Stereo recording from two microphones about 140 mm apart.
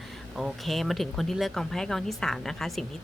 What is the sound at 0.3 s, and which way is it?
Speech, centre (ahead or behind).